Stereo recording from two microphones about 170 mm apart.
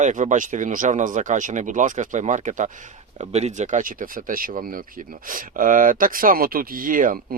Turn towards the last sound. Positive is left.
turn(degrees=-55)  # may be behind; listen again after turning